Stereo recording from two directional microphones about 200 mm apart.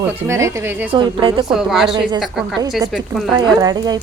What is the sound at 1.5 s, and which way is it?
Speech, centre (ahead or behind).